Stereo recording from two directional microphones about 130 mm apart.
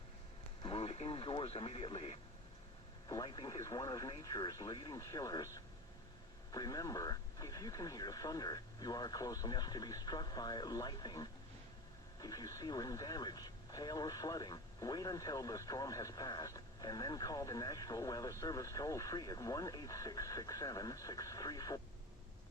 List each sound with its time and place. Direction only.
0.6 s speech: 50° left (ahead or behind)
3.2 s speech: 35° left (ahead or behind)